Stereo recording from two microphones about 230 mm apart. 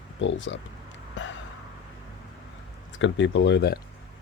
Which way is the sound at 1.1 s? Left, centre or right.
Left.